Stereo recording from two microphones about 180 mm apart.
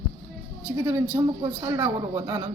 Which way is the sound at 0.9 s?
15° right (ahead or behind).